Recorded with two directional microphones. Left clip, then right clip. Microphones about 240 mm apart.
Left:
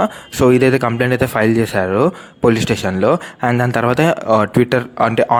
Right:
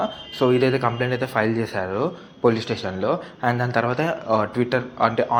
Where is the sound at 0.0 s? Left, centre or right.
Left.